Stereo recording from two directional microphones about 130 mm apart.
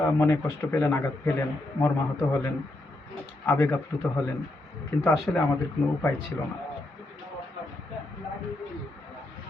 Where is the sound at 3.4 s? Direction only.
20° left (ahead or behind).